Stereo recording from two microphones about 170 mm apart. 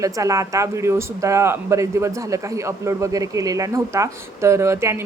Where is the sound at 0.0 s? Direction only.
20° right (ahead or behind).